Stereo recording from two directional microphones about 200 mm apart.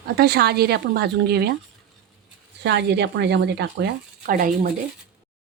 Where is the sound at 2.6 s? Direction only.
60° right (ahead or behind).